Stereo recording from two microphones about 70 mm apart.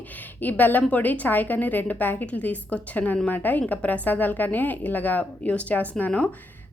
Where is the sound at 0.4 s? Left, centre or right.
Left.